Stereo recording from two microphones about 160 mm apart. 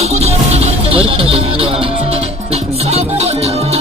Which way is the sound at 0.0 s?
40° right (ahead or behind).